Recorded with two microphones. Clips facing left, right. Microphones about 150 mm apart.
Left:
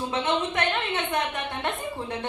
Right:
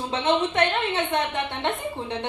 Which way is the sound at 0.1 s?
30° right (ahead or behind).